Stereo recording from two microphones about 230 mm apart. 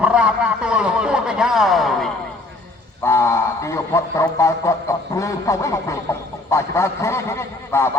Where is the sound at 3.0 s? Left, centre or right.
Centre.